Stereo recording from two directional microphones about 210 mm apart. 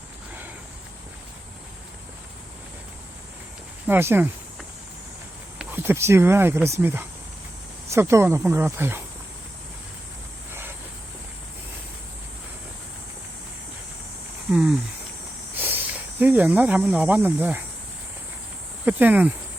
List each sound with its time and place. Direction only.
3.8 s speech: 10° right (ahead or behind)
5.5 s speech: 10° right (ahead or behind)
14.5 s speech: 5° right (ahead or behind)
15.5 s a sound: 10° right (ahead or behind)
16.2 s speech: 5° right (ahead or behind)
18.9 s speech: 10° right (ahead or behind)